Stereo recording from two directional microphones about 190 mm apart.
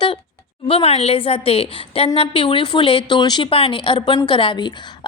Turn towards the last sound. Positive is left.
turn(degrees=25)  # may be behind; listen again after turning